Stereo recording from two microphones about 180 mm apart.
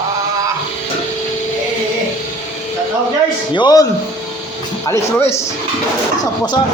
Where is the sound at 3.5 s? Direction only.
20° left (ahead or behind).